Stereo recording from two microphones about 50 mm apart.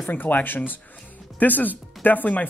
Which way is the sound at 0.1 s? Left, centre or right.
Left.